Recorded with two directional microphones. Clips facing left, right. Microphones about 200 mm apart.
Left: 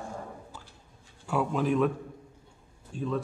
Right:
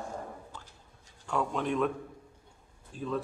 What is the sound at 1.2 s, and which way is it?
Speech, 5° left (ahead or behind).